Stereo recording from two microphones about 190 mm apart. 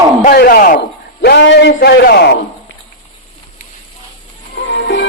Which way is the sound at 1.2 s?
65° left (ahead or behind).